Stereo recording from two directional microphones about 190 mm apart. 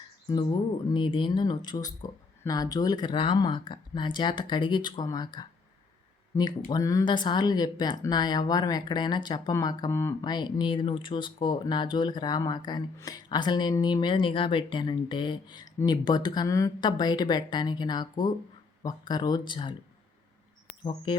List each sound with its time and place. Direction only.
0.9 s speech: 25° left (ahead or behind)
20.8 s speech: 25° left (ahead or behind)